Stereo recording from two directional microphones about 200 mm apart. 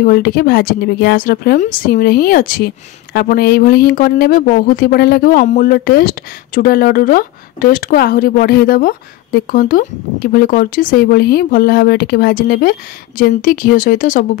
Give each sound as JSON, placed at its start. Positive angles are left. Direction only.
{"t": 0.0, "sound": "speech", "side_deg": 50}